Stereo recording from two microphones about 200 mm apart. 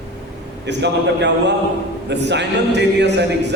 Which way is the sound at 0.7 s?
60° right (ahead or behind).